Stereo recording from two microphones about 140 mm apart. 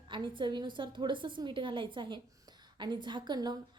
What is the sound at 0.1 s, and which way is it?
A woman's voice, 35° right (ahead or behind).